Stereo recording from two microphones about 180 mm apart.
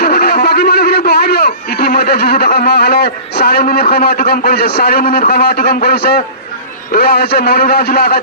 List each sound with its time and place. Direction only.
0.0 s a man's voice: 55° left (ahead or behind)